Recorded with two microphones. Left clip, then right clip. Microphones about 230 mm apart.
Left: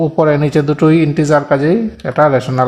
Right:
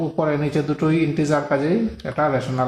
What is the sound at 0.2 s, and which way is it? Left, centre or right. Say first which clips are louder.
Speech: left 9 dB; left.